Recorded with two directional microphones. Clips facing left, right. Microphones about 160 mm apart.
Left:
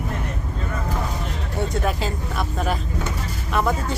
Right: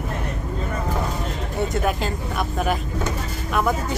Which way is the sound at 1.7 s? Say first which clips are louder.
Right 1 dB; centre (ahead or behind).